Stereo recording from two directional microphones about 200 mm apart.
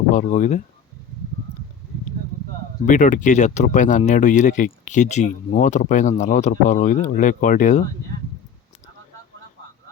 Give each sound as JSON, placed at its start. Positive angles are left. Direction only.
{"t": 0.1, "sound": "speech", "side_deg": 40}
{"t": 2.8, "sound": "speech", "side_deg": 40}